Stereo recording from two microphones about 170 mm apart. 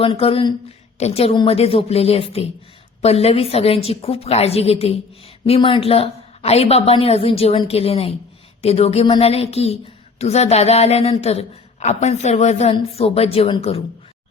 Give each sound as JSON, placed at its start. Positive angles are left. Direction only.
{"t": 0.0, "sound": "a woman's voice", "side_deg": 30}